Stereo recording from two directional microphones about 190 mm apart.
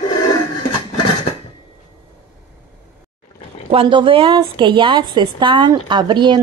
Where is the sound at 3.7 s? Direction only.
30° right (ahead or behind).